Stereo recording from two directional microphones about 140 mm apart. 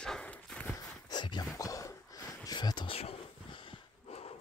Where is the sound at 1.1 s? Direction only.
30° left (ahead or behind).